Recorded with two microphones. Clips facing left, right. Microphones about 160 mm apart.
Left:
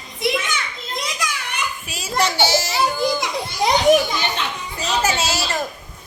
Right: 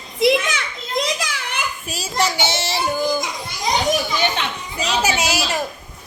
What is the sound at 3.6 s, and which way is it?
Speech, 65° left (ahead or behind).